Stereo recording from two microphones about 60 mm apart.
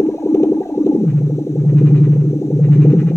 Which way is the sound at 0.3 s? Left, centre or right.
Left.